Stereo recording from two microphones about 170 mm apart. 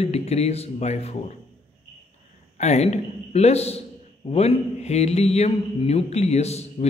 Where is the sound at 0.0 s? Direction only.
40° left (ahead or behind).